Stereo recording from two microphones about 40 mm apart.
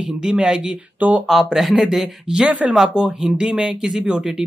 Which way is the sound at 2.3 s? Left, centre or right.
Right.